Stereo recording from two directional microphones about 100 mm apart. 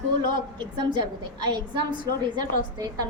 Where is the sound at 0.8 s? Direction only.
50° right (ahead or behind).